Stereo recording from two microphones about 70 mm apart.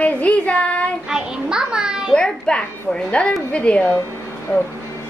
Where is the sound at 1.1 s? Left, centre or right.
Centre.